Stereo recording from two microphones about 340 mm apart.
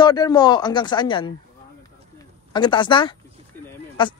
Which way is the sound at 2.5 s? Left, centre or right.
Centre.